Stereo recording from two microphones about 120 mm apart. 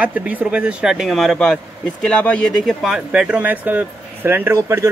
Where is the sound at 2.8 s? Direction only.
5° right (ahead or behind).